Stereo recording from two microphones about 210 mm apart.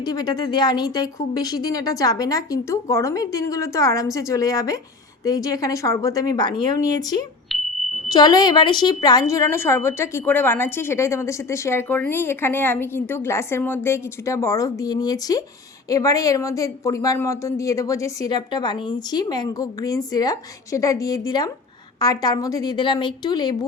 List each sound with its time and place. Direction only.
0.0 s a woman's voice: 20° left (ahead or behind)
7.5 s a sound: centre (ahead or behind)
8.0 s a woman's voice: 20° left (ahead or behind)